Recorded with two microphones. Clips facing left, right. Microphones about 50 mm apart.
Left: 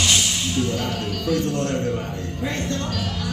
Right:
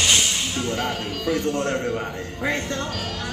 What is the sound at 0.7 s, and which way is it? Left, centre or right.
Music, right.